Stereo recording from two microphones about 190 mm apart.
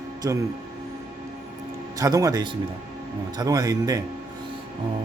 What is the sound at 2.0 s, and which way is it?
Speech, 20° right (ahead or behind).